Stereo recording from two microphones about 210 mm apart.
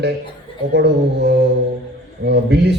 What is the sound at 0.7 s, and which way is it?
A man's voice, 50° right (ahead or behind).